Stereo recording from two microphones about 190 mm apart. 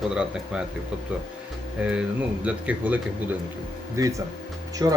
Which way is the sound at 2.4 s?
5° right (ahead or behind).